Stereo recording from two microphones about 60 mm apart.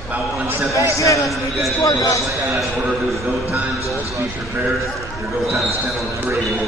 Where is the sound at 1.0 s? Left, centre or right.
Left.